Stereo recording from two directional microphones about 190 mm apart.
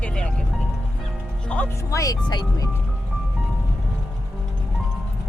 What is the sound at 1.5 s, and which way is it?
Speech, 10° left (ahead or behind).